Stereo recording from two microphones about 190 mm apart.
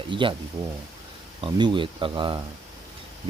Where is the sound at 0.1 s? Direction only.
25° right (ahead or behind).